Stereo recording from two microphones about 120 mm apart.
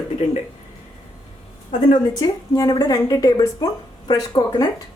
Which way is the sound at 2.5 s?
30° left (ahead or behind).